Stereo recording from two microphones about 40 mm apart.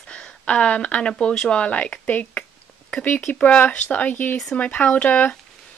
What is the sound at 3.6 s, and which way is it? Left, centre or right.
A woman's voice, left.